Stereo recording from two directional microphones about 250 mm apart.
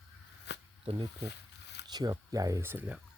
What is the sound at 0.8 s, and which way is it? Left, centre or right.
Speech, right.